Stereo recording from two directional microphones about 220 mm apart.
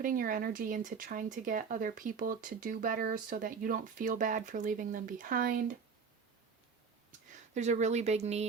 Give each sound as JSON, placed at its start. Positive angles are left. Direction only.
{"t": 0.0, "sound": "speech", "side_deg": -40}
{"t": 7.5, "sound": "speech", "side_deg": -30}